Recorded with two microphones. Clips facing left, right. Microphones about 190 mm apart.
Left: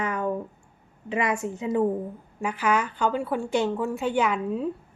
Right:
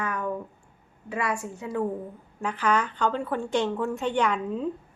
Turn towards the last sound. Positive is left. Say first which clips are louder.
# left 1 dB
turn(degrees=5)  # may be behind; listen again after turning